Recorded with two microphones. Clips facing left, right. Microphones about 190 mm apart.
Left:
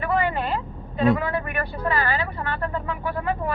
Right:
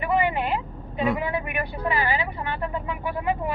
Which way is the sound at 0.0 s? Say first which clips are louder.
Even; 15° right (ahead or behind).